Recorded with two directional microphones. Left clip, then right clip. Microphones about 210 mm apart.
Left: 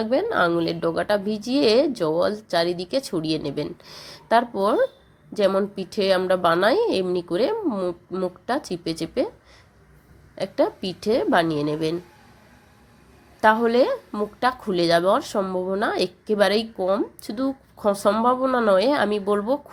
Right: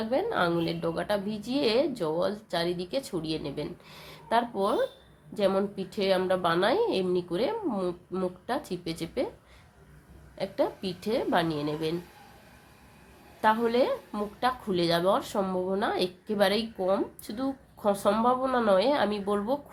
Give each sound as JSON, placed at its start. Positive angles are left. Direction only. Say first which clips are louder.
{"t": 0.0, "sound": "a woman's voice", "louder": "left 6 dB", "side_deg": 30}
{"t": 10.3, "sound": "a woman's voice", "louder": "left 6 dB", "side_deg": 30}
{"t": 13.4, "sound": "speech", "louder": "left 7 dB", "side_deg": 30}